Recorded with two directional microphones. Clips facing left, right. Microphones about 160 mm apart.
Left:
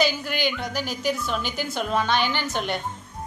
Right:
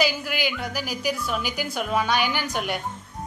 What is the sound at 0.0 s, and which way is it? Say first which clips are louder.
A woman's voice: left 1 dB; 5° right (ahead or behind).